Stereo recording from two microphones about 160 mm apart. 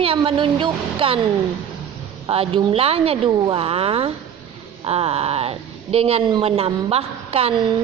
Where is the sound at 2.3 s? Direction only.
35° right (ahead or behind).